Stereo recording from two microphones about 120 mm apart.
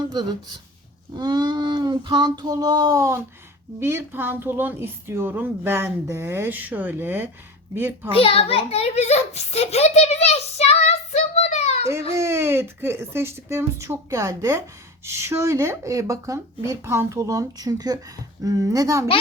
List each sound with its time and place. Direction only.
0.0 s speech: 35° right (ahead or behind)
1.1 s child singing: 35° right (ahead or behind)
3.8 s a woman's voice: 20° right (ahead or behind)
8.1 s a child's voice: 50° left (ahead or behind); by 11.8 s 65° left (ahead or behind)
12.1 s a woman's voice: 25° right (ahead or behind)